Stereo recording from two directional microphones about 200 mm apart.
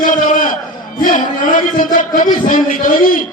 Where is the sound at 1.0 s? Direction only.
40° left (ahead or behind).